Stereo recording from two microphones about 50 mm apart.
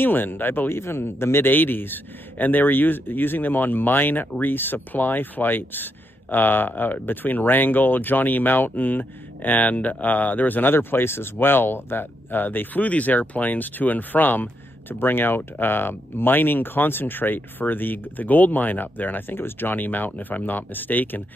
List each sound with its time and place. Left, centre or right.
0.0 s speech: left